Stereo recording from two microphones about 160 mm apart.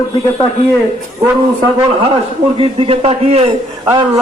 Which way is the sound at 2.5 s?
35° right (ahead or behind).